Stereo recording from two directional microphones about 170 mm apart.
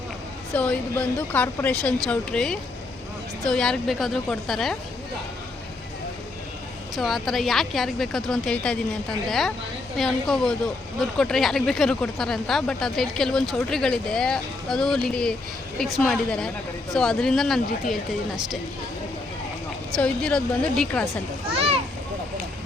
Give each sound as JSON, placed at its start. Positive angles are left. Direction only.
{"t": 0.5, "sound": "speech", "side_deg": 5}
{"t": 6.9, "sound": "speech", "side_deg": 0}
{"t": 10.0, "sound": "speech", "side_deg": 0}
{"t": 20.0, "sound": "speech", "side_deg": 5}
{"t": 21.5, "sound": "a sound", "side_deg": -35}